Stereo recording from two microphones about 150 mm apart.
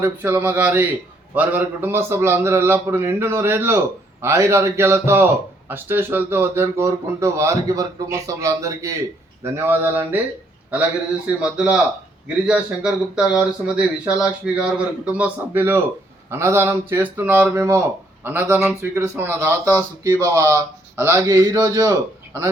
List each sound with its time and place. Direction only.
0.0 s speech: 15° right (ahead or behind)
11.3 s speech: 5° right (ahead or behind)